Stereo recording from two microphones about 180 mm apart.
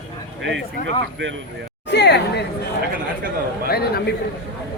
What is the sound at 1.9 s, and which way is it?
Speech, 70° left (ahead or behind).